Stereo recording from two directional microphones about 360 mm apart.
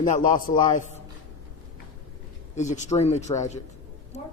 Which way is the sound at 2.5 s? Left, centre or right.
Centre.